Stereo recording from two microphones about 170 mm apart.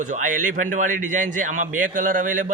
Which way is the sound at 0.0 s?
50° right (ahead or behind).